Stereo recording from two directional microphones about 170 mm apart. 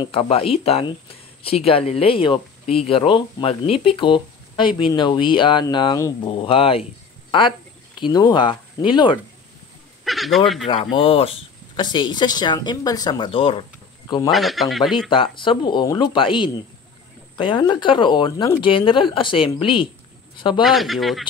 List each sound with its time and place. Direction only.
0.0 s speech: 35° left (ahead or behind)
10.0 s a sound: centre (ahead or behind)
10.7 s speech: 30° left (ahead or behind)
14.3 s speech: centre (ahead or behind)
15.0 s speech: 30° left (ahead or behind)
20.6 s speech: centre (ahead or behind)